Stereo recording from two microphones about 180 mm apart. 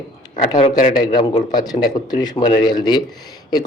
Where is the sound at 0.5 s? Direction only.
25° left (ahead or behind).